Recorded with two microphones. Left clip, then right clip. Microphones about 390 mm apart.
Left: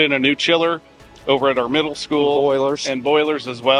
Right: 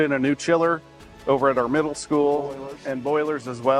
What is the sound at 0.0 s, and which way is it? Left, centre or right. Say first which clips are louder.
Speech: left 6 dB; right.